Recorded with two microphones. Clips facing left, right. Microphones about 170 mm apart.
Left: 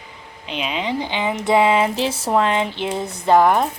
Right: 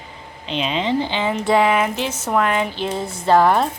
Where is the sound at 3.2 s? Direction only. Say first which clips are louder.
Even; 15° left (ahead or behind).